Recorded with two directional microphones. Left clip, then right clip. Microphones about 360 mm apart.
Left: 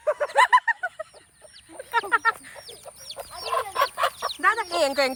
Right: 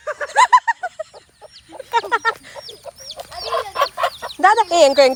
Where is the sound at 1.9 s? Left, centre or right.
Centre.